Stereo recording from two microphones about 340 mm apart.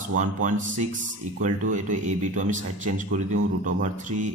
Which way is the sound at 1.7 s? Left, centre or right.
Right.